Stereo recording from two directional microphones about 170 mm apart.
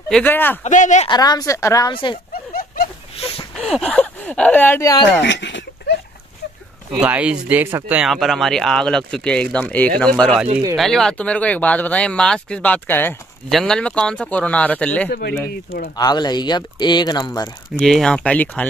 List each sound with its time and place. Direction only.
0.1 s speech: 10° left (ahead or behind)
0.7 s speech: 45° left (ahead or behind)
1.0 s speech: 25° left (ahead or behind)
3.2 s a sound: 35° left (ahead or behind)
3.5 s speech: centre (ahead or behind)
5.2 s a sound: 90° left
6.9 s speech: 5° right (ahead or behind)
15.0 s speech: 65° left (ahead or behind)
16.0 s speech: 25° left (ahead or behind)
17.7 s speech: centre (ahead or behind)